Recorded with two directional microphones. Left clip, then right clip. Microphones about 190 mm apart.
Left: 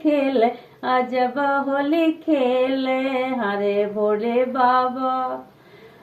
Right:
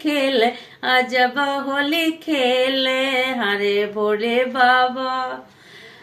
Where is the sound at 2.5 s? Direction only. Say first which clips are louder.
Right 2 dB; 20° right (ahead or behind).